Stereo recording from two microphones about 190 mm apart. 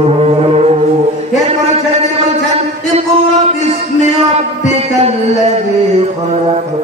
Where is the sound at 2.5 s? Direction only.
35° right (ahead or behind).